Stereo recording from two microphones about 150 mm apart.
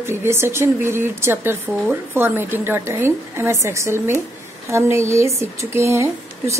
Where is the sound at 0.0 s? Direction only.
15° right (ahead or behind).